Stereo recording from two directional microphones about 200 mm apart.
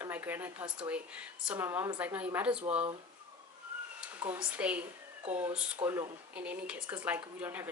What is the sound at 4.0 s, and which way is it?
Speech, 10° right (ahead or behind).